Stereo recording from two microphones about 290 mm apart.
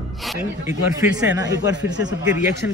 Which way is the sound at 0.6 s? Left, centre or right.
Centre.